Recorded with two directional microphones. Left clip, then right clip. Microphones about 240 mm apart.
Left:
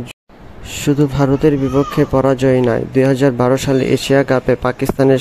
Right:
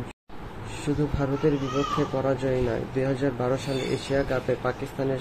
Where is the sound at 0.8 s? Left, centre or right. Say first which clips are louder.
Left 13 dB; left.